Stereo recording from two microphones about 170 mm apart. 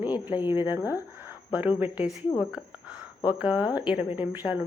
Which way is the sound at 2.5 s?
5° right (ahead or behind).